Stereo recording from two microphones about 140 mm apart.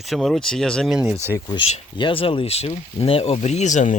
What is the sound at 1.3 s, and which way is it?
Speech, 30° left (ahead or behind).